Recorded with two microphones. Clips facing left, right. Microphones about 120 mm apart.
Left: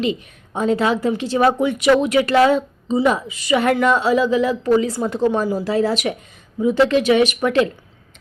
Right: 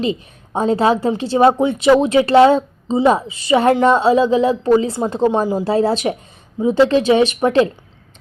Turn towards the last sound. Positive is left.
turn(degrees=-30)  # may be behind; listen again after turning